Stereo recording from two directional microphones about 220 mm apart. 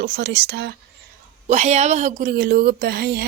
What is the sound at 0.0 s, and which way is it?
Speech, 50° right (ahead or behind).